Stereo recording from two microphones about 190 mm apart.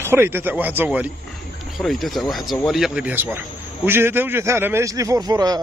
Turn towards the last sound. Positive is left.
turn(degrees=-20)  # may be behind; listen again after turning